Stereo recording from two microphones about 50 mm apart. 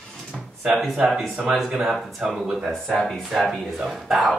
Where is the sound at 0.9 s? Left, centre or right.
Centre.